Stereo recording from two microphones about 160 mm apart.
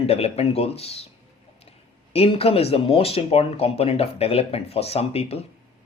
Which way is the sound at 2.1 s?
35° left (ahead or behind).